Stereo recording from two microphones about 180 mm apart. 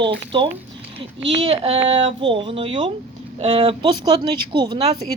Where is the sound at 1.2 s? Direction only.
90° right.